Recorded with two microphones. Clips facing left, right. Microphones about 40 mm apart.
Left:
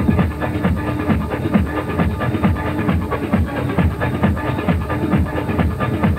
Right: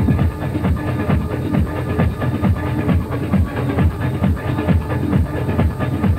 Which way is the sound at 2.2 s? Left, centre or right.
Left.